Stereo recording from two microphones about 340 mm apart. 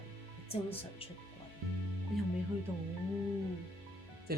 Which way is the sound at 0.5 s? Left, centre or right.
Centre.